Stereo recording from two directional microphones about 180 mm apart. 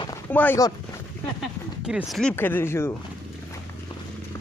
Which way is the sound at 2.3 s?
10° left (ahead or behind).